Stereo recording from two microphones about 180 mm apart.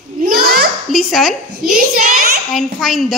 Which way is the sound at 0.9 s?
Centre (ahead or behind).